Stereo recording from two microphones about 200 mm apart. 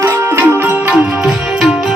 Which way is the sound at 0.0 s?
10° right (ahead or behind).